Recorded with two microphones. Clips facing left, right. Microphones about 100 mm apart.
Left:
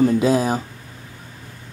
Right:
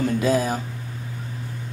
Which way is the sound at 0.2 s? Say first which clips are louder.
Left 3 dB; 30° left (ahead or behind).